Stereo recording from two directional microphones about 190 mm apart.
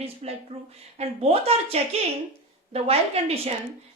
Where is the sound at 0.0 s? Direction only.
30° right (ahead or behind).